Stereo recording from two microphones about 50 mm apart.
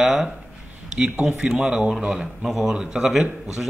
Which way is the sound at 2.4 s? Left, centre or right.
Centre.